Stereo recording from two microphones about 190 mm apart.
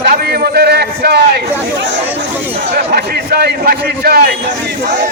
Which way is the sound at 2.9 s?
55° right (ahead or behind).